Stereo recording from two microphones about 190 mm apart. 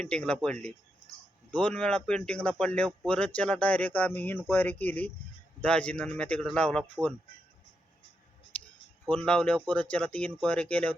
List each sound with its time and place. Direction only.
0.0 s speech: 5° left (ahead or behind)
9.0 s speech: 5° left (ahead or behind)